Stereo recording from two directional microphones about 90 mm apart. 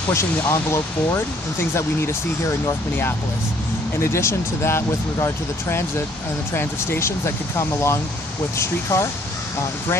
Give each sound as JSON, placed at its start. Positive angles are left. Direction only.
{"t": 0.1, "sound": "speech", "side_deg": 30}